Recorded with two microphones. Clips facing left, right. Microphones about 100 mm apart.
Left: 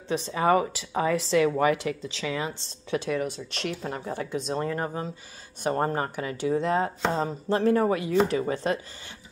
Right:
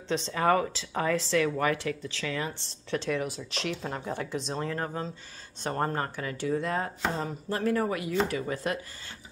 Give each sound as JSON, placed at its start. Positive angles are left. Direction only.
{"t": 0.1, "sound": "speech", "side_deg": 10}